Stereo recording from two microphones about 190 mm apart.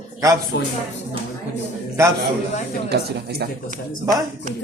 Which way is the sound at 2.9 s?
60° right (ahead or behind).